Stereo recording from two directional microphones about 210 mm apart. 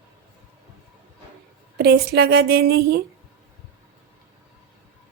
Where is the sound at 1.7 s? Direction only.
50° right (ahead or behind).